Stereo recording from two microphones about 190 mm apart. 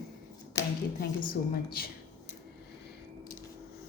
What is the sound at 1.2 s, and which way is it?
Speech, 50° left (ahead or behind).